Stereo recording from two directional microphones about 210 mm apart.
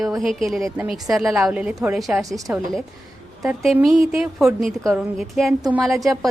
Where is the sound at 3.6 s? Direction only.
Centre (ahead or behind).